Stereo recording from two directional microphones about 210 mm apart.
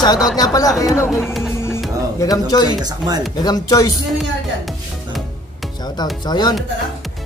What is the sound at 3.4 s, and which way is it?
Speech, 15° left (ahead or behind).